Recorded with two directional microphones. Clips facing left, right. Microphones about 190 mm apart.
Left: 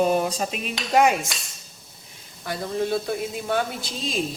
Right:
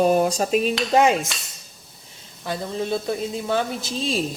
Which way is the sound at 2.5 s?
25° right (ahead or behind).